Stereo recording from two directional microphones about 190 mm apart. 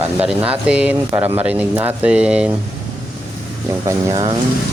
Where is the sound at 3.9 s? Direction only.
15° right (ahead or behind).